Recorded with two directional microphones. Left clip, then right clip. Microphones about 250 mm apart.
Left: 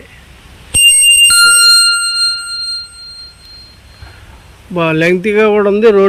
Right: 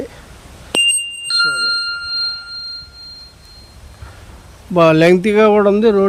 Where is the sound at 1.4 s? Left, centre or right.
Centre.